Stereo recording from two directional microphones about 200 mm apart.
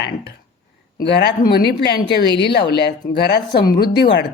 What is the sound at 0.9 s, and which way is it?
Speech, 55° left (ahead or behind).